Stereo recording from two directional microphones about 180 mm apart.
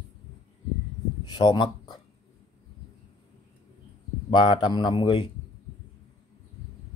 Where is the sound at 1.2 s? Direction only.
25° left (ahead or behind).